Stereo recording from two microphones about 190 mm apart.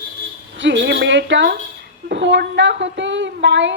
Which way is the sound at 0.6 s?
70° right (ahead or behind).